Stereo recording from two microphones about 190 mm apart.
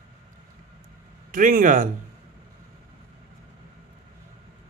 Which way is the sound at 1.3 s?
45° right (ahead or behind).